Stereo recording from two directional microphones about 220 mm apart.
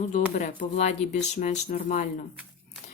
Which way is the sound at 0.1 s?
35° left (ahead or behind).